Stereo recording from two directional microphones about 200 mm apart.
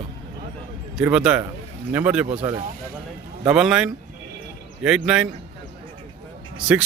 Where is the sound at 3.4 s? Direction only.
5° right (ahead or behind).